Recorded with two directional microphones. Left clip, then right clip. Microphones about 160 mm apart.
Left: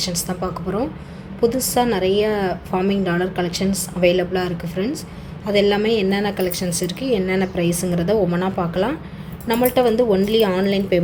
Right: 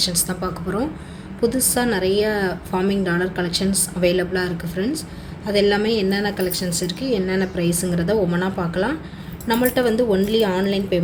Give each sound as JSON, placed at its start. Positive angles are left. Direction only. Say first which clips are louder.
{"t": 0.0, "sound": "a woman's voice", "louder": "right 1 dB", "side_deg": 10}